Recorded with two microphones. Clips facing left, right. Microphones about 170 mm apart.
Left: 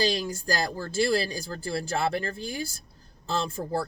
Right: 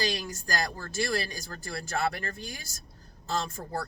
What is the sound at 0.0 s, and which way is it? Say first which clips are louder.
Speech: left 5 dB; 30° left (ahead or behind).